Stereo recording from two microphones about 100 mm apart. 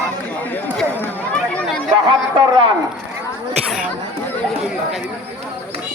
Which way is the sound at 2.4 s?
60° right (ahead or behind).